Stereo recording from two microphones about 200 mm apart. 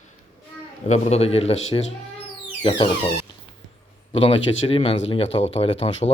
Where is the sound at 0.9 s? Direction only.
35° left (ahead or behind).